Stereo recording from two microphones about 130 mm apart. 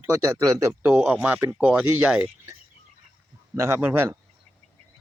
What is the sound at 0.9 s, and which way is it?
Speech, 10° right (ahead or behind).